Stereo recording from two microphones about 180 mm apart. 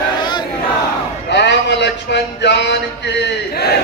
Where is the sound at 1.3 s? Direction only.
70° left (ahead or behind).